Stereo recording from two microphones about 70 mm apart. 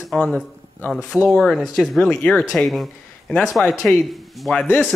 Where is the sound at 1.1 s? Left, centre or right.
Right.